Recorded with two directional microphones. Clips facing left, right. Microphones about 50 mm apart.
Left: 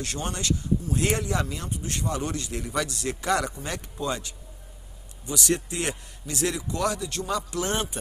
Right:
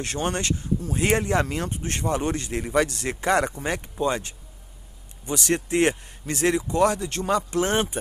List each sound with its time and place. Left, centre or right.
0.0 s speech: right